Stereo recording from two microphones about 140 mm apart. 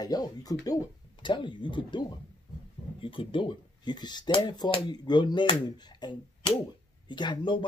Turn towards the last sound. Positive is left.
turn(degrees=35)  # may be behind; listen again after turning